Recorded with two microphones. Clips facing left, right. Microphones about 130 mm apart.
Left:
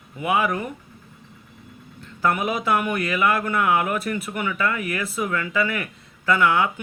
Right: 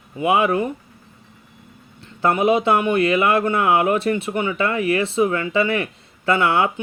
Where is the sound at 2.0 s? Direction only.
30° right (ahead or behind).